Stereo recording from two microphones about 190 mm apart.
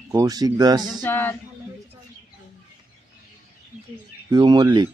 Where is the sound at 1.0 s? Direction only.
10° left (ahead or behind).